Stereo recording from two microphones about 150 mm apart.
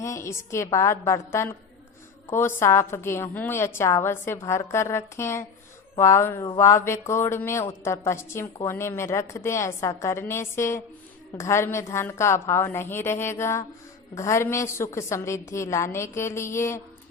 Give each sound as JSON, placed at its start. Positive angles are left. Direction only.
{"t": 0.0, "sound": "a woman's voice", "side_deg": 20}